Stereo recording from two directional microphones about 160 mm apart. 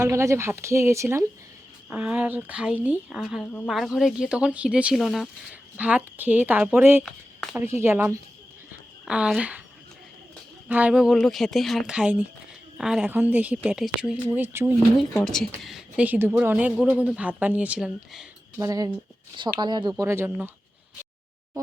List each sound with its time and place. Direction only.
0.0 s a woman's voice: 15° right (ahead or behind)
10.7 s a woman's voice: 10° right (ahead or behind)
14.8 s a woman's voice: 5° left (ahead or behind)
18.6 s speech: 20° right (ahead or behind)
20.0 s a woman's voice: 15° right (ahead or behind)